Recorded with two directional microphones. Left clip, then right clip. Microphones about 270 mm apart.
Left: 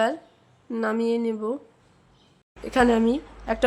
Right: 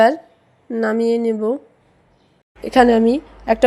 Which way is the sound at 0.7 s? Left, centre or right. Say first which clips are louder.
Right 7 dB; centre.